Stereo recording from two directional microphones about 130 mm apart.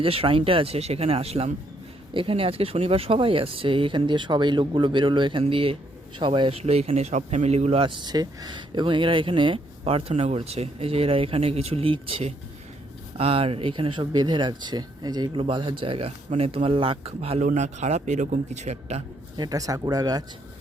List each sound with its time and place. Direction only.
0.0 s speech: 45° right (ahead or behind)
7.9 s speech: 35° right (ahead or behind); by 17.4 s 50° right (ahead or behind)
17.4 s a man's voice: 65° right (ahead or behind)
19.4 s speech: 30° right (ahead or behind)